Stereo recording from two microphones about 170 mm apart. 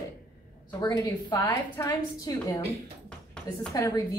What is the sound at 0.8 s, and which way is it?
Speech, 25° left (ahead or behind).